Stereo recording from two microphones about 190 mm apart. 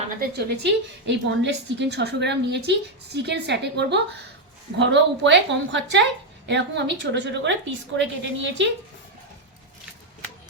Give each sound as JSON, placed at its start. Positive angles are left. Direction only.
{"t": 0.2, "sound": "a woman's voice", "side_deg": -60}